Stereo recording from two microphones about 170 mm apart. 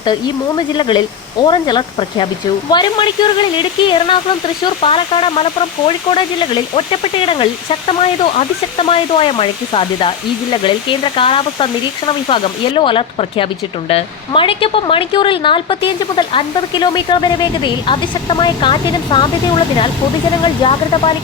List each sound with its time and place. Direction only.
0.0 s speech: 25° left (ahead or behind)